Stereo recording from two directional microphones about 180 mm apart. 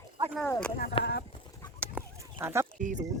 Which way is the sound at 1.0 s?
65° left (ahead or behind).